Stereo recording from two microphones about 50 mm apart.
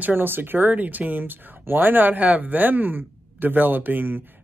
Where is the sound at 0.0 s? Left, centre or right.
Right.